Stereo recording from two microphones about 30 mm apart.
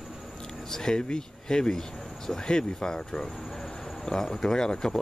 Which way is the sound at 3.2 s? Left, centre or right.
Centre.